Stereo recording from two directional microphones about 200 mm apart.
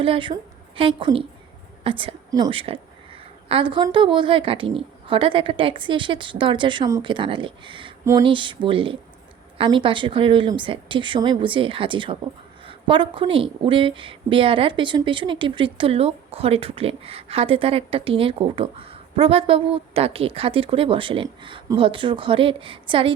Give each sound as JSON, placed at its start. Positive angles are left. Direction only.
{"t": 0.0, "sound": "a woman's voice", "side_deg": -25}